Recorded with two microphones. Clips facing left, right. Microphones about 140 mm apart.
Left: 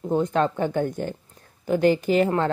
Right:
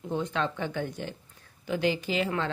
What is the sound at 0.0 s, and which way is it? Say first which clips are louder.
Speech: left 8 dB; 45° left (ahead or behind).